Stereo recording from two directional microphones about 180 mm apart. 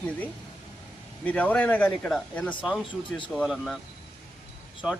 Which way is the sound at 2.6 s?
5° right (ahead or behind).